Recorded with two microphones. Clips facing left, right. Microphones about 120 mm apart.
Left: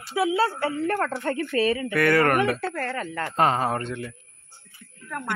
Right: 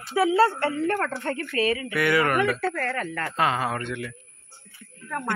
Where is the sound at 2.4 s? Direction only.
25° left (ahead or behind).